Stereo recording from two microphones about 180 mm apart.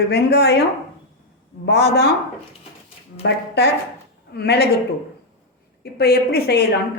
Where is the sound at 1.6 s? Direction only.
70° left (ahead or behind).